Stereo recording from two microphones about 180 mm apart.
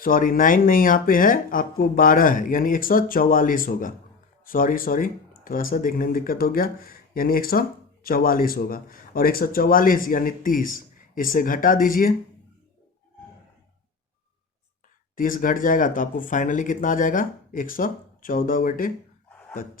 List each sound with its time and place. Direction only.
0.0 s speech: 50° left (ahead or behind)
15.1 s speech: 50° left (ahead or behind)